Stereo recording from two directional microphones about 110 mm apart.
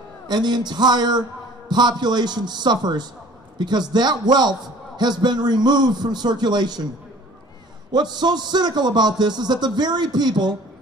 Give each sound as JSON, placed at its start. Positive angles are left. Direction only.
{"t": 0.3, "sound": "a man's voice", "side_deg": -40}
{"t": 7.9, "sound": "a man's voice", "side_deg": -40}